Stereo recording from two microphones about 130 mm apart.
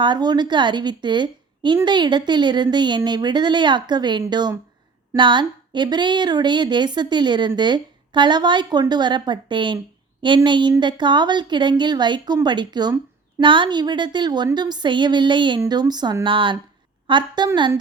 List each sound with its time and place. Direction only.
0.0 s speech: 35° right (ahead or behind)